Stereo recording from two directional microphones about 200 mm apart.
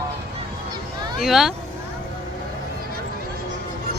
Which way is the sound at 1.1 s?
Centre (ahead or behind).